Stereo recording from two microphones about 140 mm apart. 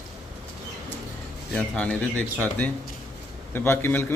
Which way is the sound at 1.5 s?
10° left (ahead or behind).